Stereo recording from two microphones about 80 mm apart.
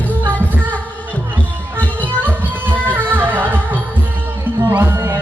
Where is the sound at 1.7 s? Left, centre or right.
Right.